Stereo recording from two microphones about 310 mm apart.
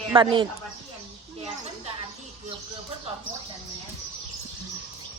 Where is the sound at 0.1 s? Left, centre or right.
Centre.